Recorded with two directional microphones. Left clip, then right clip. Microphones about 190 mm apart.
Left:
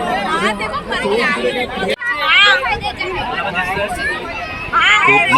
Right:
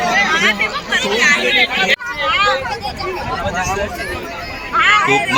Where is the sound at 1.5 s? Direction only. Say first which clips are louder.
Right 5 dB; 65° left (ahead or behind).